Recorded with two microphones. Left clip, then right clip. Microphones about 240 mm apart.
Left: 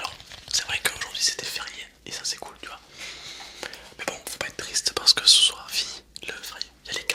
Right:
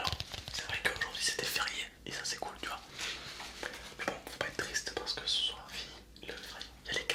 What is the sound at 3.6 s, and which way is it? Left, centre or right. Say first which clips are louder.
Whispering: left 4 dB; left.